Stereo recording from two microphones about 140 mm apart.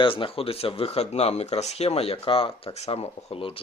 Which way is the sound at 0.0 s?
40° left (ahead or behind).